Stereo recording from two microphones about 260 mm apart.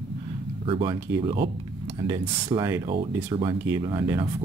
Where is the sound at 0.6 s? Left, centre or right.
Centre.